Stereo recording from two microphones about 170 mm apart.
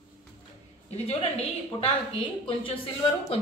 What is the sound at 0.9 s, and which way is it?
A woman's voice, 35° left (ahead or behind).